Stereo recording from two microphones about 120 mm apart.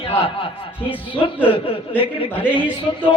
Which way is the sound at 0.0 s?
50° left (ahead or behind).